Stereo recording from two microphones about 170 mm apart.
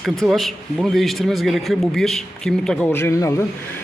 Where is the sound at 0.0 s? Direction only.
Centre (ahead or behind).